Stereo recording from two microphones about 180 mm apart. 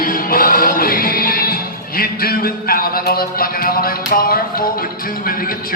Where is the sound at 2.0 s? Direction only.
55° left (ahead or behind).